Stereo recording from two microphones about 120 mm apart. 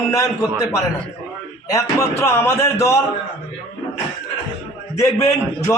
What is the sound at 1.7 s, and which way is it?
A man's voice, 25° left (ahead or behind).